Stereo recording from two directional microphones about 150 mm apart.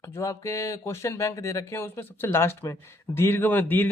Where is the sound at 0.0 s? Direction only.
20° left (ahead or behind).